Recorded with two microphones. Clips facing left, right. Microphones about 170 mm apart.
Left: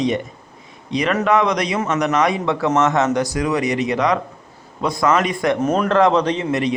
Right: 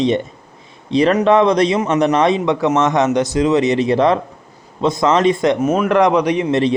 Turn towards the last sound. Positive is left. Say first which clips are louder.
# right 4 dB
turn(degrees=-30)  # may be behind; listen again after turning